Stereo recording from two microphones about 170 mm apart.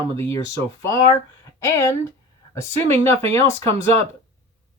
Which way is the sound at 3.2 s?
15° left (ahead or behind).